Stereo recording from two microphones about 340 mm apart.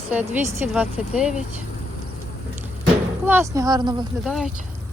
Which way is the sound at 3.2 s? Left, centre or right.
Centre.